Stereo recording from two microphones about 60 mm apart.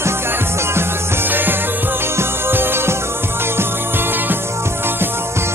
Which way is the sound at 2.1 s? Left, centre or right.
Right.